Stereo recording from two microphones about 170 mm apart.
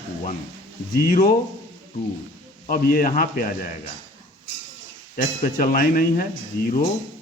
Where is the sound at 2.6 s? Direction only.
50° left (ahead or behind).